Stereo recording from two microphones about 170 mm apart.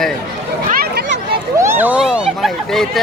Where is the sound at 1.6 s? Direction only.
15° right (ahead or behind).